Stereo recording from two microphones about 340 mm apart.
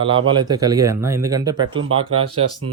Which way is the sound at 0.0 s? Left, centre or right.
Centre.